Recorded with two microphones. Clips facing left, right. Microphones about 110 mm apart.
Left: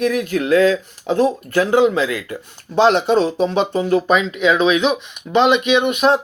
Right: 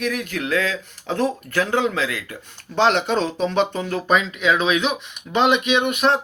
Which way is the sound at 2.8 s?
40° left (ahead or behind).